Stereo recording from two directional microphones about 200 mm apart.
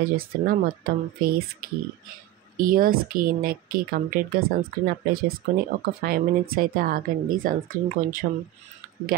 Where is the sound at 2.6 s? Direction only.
45° right (ahead or behind).